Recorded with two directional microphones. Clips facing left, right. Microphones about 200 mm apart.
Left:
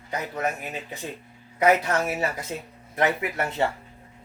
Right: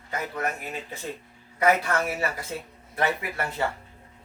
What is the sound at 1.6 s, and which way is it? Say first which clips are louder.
Speech: left 2 dB; 20° left (ahead or behind).